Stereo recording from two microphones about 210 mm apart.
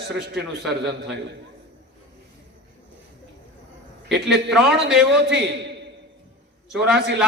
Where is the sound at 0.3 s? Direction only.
Centre (ahead or behind).